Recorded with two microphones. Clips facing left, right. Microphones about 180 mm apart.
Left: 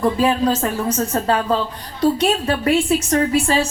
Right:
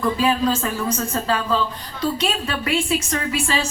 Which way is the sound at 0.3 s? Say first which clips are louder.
Left 2 dB; 40° left (ahead or behind).